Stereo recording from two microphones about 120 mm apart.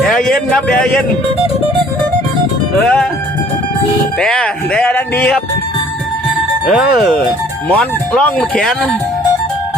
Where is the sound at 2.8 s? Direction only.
10° left (ahead or behind).